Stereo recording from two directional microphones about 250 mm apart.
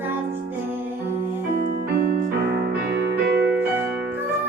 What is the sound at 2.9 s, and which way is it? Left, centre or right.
Music, right.